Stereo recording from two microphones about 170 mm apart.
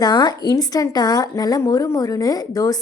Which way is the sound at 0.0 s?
25° left (ahead or behind).